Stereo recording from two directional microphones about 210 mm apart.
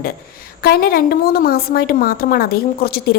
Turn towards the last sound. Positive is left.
turn(degrees=45)  # may be behind; listen again after turning